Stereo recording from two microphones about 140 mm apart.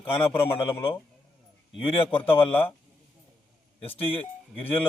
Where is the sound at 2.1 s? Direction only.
40° left (ahead or behind).